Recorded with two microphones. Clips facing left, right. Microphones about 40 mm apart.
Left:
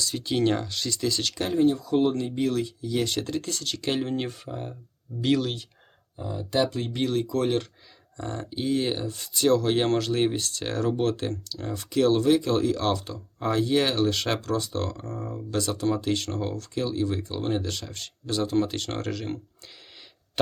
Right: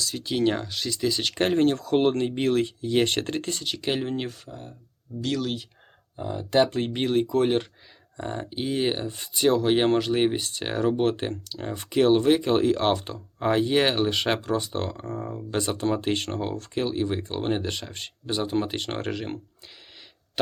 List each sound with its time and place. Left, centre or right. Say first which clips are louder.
0.0 s speech: even; centre
1.5 s speech: left 2 dB; right
3.6 s speech: even; centre
4.4 s speech: left 6 dB; left
5.4 s speech: even; centre
6.1 s speech: right 4 dB; right